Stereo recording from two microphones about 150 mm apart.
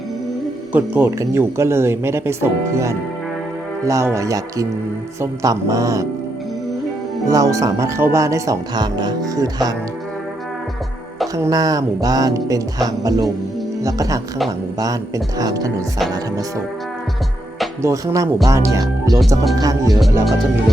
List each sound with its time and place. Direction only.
0.7 s speech: 10° right (ahead or behind)
7.3 s speech: 20° right (ahead or behind)
11.3 s speech: 20° right (ahead or behind)
17.8 s speech: 20° right (ahead or behind)